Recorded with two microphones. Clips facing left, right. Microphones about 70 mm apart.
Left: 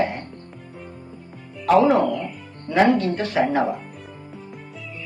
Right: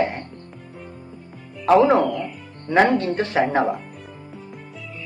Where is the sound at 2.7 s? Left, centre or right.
Right.